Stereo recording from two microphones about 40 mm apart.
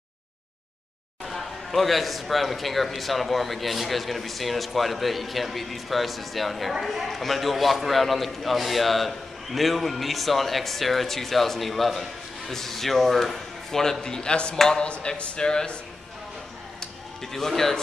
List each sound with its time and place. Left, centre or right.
1.2 s a man's voice: centre; by 14.5 s left
14.5 s speech: centre
14.8 s speech: left
16.8 s a sound: centre